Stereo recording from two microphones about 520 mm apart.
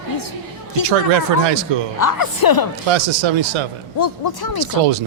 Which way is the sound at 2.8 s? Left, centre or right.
Right.